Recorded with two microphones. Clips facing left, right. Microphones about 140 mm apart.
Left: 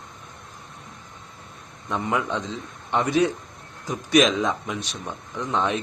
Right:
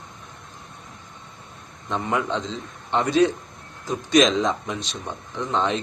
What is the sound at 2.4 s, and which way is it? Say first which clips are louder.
A man's voice: right 1 dB; 15° left (ahead or behind).